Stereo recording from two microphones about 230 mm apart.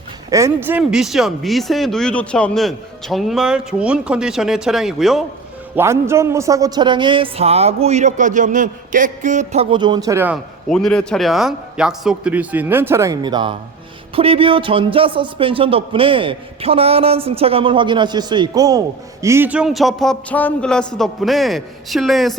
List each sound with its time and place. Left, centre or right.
0.3 s speech: centre
5.7 s speech: centre